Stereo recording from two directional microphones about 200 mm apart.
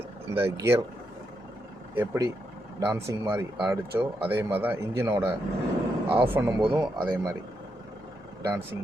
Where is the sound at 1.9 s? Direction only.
15° right (ahead or behind).